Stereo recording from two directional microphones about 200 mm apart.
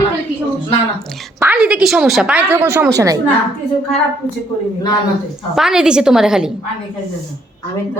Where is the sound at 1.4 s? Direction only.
5° right (ahead or behind).